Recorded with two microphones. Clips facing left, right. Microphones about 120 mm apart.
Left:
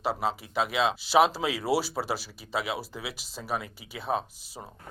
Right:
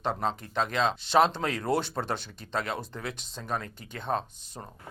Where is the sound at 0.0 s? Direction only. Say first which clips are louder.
Left 1 dB; 5° left (ahead or behind).